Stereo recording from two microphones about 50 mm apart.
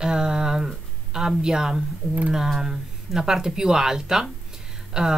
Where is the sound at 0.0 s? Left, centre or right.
Centre.